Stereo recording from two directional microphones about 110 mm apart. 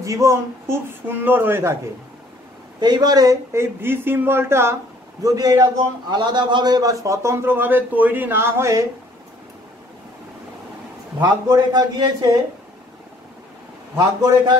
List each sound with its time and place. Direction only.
0.0 s a man's voice: 30° right (ahead or behind)
2.8 s a man's voice: 40° right (ahead or behind)
3.5 s a man's voice: 20° right (ahead or behind)
5.2 s a man's voice: 35° right (ahead or behind)
11.1 s a man's voice: 40° right (ahead or behind)